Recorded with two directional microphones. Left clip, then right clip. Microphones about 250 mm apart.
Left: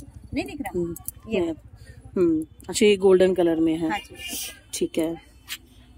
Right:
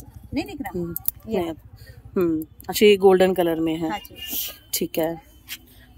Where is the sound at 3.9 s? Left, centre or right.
Centre.